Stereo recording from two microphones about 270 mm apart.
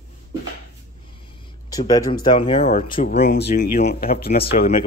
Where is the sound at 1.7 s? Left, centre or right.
Centre; by 4.4 s left.